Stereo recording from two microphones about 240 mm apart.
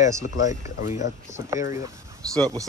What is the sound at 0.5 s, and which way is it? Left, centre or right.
Speech, left.